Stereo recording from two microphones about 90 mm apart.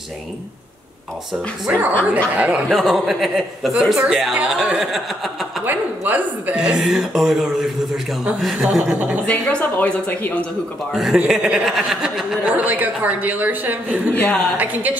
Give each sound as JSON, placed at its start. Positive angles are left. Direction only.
{"t": 1.7, "sound": "speech", "side_deg": -15}
{"t": 2.8, "sound": "speech", "side_deg": 0}
{"t": 5.7, "sound": "speech", "side_deg": -20}
{"t": 8.8, "sound": "a woman's voice", "side_deg": -20}
{"t": 9.2, "sound": "a woman's voice", "side_deg": 15}
{"t": 10.9, "sound": "speech", "side_deg": 0}
{"t": 12.5, "sound": "a woman's voice", "side_deg": -20}
{"t": 14.1, "sound": "a woman's voice", "side_deg": 20}
{"t": 14.6, "sound": "speech", "side_deg": -20}